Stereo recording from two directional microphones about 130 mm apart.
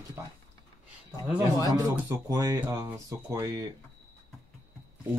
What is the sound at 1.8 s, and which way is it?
A man's voice, 25° right (ahead or behind).